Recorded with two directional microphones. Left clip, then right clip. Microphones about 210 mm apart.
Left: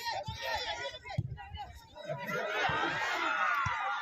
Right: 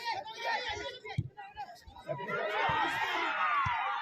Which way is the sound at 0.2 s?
25° left (ahead or behind).